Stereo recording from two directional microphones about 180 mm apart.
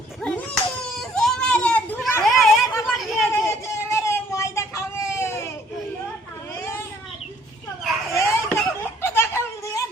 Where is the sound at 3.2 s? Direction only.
15° left (ahead or behind).